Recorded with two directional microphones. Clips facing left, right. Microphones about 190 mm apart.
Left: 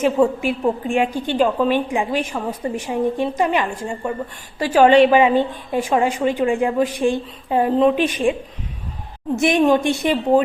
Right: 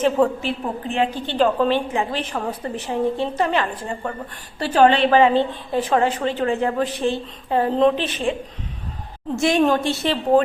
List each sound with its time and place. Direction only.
0.0 s a woman's voice: 10° left (ahead or behind)
9.4 s a woman's voice: 15° left (ahead or behind)